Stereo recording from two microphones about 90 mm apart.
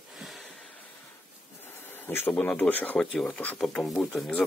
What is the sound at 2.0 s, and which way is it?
Speech, 20° left (ahead or behind).